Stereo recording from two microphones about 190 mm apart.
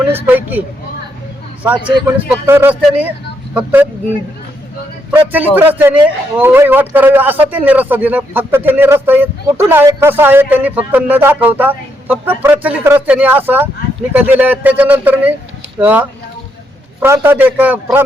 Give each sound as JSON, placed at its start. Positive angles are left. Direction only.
{"t": 0.1, "sound": "speech", "side_deg": -10}
{"t": 2.1, "sound": "speech", "side_deg": -10}
{"t": 5.1, "sound": "speech", "side_deg": -10}